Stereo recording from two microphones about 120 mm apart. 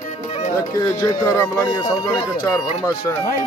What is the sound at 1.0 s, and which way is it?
Speech, 25° left (ahead or behind).